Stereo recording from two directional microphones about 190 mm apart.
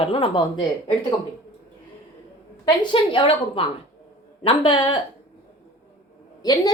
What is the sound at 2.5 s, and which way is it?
Speech, 20° left (ahead or behind).